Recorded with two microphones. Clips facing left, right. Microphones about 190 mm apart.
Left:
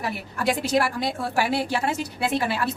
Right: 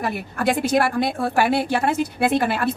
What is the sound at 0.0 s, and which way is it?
A woman's voice, 55° right (ahead or behind).